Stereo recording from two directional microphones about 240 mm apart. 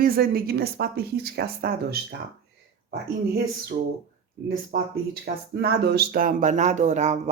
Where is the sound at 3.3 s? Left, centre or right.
Right.